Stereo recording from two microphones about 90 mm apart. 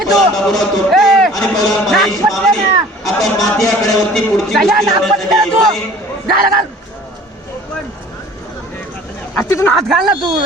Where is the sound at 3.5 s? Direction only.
5° left (ahead or behind).